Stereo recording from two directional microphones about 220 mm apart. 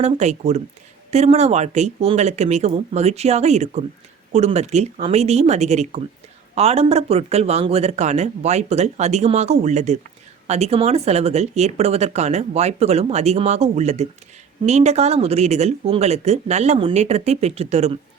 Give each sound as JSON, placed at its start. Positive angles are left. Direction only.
{"t": 0.0, "sound": "speech", "side_deg": -30}